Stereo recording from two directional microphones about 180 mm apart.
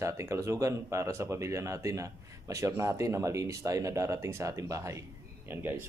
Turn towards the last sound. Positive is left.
turn(degrees=-10)  # may be behind; listen again after turning